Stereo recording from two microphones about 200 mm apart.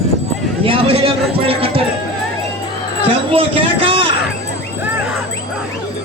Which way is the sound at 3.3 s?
25° right (ahead or behind).